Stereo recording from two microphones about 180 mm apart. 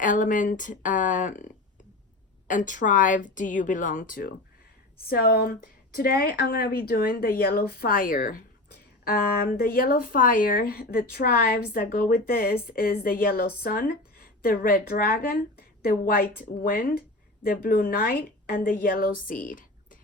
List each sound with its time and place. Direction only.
0.0 s a woman's voice: 45° left (ahead or behind)
2.5 s a woman's voice: 45° left (ahead or behind)